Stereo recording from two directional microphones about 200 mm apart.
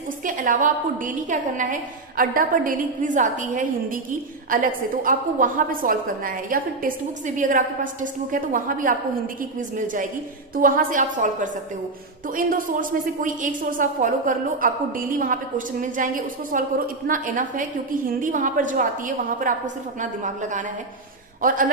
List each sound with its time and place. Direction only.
0.3 s a woman's voice: 40° right (ahead or behind)